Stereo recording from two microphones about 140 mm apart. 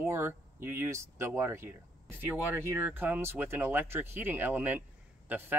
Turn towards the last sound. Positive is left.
turn(degrees=-15)  # may be behind; listen again after turning